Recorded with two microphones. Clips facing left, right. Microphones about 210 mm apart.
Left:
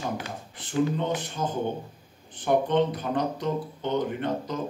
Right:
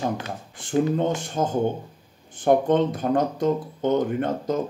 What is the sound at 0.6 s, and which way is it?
Speech, 45° right (ahead or behind).